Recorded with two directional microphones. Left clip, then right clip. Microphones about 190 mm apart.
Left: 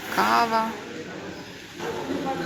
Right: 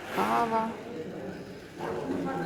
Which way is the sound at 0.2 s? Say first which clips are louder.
Left 6 dB; 20° left (ahead or behind).